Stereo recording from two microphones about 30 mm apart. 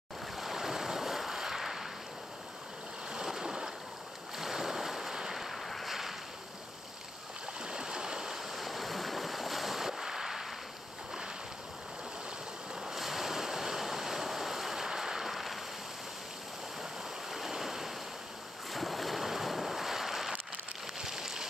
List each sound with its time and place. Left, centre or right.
0.4 s waves: centre
3.3 s boat: centre
5.5 s boat: centre
5.9 s boat: centre
7.6 s stream: right
8.5 s ocean: centre
12.9 s waves: centre
17.3 s stream: centre
18.7 s boat: centre
21.0 s a sound: centre